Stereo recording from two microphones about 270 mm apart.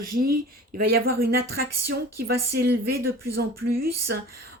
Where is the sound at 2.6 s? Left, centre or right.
Right.